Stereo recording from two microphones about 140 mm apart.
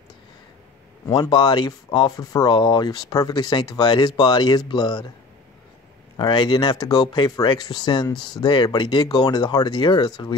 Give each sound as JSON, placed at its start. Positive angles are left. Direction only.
{"t": 1.3, "sound": "speech", "side_deg": 30}
{"t": 6.1, "sound": "speech", "side_deg": 35}